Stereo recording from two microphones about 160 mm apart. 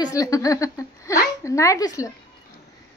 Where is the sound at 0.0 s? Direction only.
20° left (ahead or behind).